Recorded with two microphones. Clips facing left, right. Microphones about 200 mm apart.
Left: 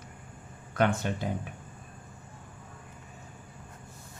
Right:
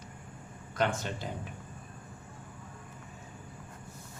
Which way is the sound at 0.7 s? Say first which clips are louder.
Left 4 dB; 55° left (ahead or behind).